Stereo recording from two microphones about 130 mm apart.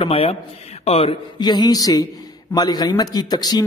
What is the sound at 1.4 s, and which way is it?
Speech, 35° left (ahead or behind).